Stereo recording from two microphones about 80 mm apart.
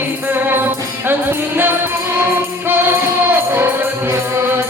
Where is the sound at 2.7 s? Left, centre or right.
Right.